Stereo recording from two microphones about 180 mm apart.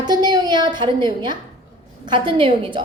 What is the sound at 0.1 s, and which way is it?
A woman's voice, 20° right (ahead or behind).